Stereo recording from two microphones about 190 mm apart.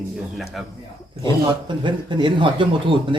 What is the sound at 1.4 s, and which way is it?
Speech, 25° right (ahead or behind).